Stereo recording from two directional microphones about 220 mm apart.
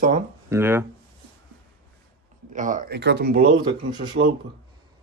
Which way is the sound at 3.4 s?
20° right (ahead or behind).